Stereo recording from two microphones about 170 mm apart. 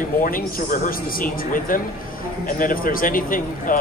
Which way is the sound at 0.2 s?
55° left (ahead or behind).